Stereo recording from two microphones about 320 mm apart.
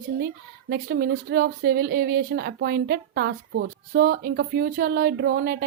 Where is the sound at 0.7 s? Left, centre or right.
Right.